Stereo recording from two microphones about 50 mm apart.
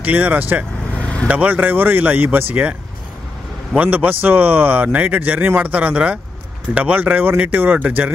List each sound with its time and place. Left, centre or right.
0.0 s a man's voice: right
0.9 s vehicle: left
1.3 s a man's voice: right
3.7 s a man's voice: right